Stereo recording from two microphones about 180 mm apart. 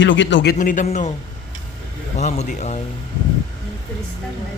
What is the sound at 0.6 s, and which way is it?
Speech, 45° left (ahead or behind).